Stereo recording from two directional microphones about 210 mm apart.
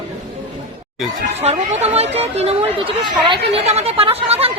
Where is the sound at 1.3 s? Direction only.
30° right (ahead or behind).